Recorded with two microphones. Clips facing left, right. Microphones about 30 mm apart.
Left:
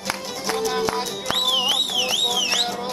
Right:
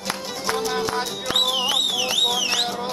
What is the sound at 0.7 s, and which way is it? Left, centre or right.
Music, centre.